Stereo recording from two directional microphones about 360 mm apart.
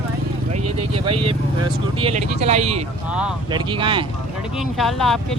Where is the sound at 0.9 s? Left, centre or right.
Centre.